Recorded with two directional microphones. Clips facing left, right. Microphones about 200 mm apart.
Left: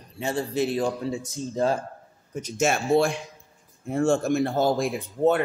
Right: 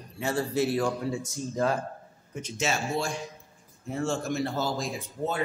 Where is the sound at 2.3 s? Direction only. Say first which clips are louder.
Left 6 dB; 45° left (ahead or behind); by 5.4 s 60° left (ahead or behind).